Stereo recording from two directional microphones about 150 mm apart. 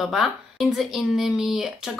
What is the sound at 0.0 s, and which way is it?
Speech, centre (ahead or behind).